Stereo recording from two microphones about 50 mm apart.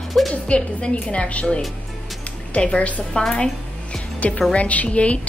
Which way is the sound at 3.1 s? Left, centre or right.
Centre.